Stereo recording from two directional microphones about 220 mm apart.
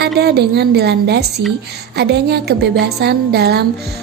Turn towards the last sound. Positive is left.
turn(degrees=-45)  # may be behind; listen again after turning